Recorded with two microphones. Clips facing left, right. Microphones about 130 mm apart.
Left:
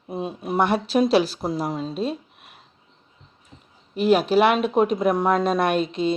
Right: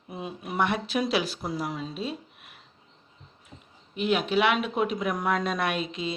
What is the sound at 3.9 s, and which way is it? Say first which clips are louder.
A woman's voice: left 7 dB; 40° left (ahead or behind).